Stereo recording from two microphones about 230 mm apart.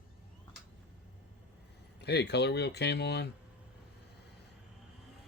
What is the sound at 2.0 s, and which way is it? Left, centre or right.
Speech, left.